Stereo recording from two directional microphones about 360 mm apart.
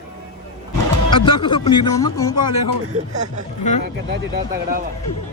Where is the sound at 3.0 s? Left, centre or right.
Centre.